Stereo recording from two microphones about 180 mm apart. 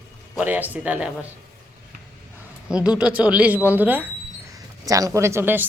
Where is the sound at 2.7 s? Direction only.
5° right (ahead or behind).